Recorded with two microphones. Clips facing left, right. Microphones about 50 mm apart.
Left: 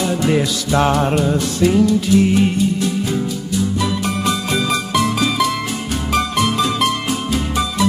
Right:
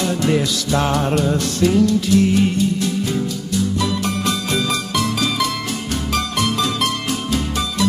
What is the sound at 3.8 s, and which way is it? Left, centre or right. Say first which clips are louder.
Music: left 1 dB; centre.